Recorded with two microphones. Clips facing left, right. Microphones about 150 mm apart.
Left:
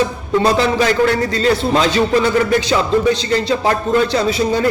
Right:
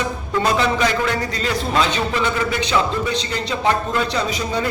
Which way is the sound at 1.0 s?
35° left (ahead or behind).